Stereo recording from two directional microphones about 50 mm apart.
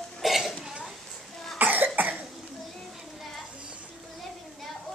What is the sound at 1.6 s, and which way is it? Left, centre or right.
Cough, right.